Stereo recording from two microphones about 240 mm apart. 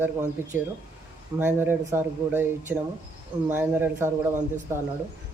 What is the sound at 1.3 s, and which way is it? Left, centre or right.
Speech, centre.